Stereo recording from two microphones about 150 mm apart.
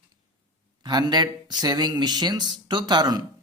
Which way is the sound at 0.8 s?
30° right (ahead or behind).